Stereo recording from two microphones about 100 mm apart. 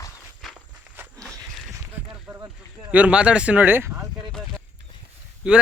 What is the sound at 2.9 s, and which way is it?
Speech, 15° right (ahead or behind).